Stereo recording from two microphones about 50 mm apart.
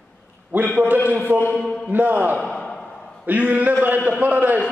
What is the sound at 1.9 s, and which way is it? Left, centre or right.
Speech, right.